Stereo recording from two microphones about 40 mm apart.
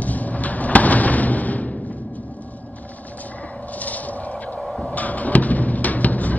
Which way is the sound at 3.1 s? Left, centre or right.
Left.